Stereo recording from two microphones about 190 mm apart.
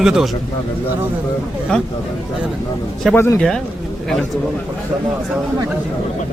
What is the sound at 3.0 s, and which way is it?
Speech, 10° left (ahead or behind).